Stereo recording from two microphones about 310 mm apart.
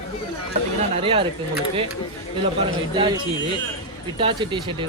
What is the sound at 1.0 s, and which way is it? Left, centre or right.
Speech, centre.